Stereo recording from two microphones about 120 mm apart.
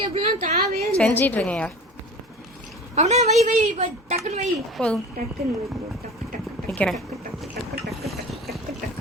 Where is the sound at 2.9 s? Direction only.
70° right (ahead or behind).